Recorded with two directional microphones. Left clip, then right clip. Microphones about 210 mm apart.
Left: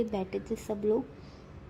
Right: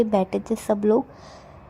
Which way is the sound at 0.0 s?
30° right (ahead or behind).